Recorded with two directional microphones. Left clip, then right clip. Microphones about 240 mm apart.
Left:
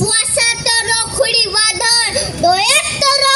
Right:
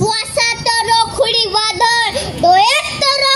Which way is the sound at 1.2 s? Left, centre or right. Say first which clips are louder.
Even; left.